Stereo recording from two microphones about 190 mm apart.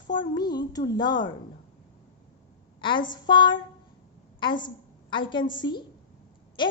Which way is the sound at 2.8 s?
25° left (ahead or behind).